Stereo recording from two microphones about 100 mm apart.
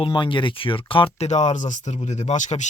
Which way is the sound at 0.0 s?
55° left (ahead or behind).